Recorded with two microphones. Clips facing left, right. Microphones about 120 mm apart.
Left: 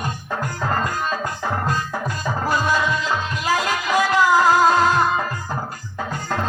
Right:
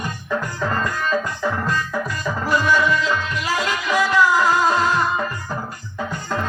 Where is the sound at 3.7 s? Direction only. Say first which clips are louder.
Right 2 dB; 40° left (ahead or behind).